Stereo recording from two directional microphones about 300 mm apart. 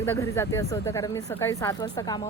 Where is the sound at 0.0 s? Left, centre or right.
Centre.